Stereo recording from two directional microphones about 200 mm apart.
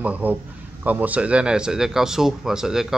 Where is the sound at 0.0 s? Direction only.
10° right (ahead or behind).